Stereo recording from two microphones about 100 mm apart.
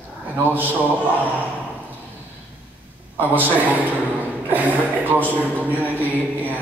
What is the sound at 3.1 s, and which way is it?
A man's voice, 20° right (ahead or behind).